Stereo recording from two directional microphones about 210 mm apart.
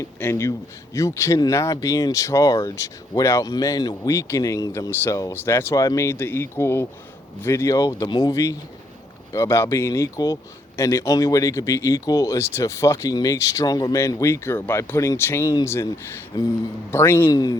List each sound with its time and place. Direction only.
0.0 s speech: 10° left (ahead or behind)
16.9 s speech: 10° left (ahead or behind)